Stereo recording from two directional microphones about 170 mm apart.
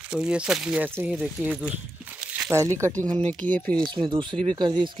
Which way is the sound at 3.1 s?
5° left (ahead or behind).